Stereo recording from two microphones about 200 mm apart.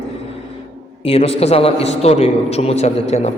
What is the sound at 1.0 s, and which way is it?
A man's voice, 30° left (ahead or behind).